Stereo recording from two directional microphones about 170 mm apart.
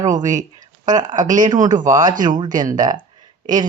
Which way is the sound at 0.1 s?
50° right (ahead or behind).